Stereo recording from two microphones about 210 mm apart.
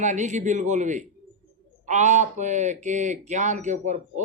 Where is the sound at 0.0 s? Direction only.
35° right (ahead or behind).